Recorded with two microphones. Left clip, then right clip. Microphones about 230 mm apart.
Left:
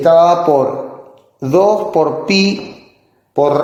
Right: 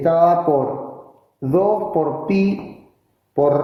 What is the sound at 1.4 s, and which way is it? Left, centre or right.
Speech, left.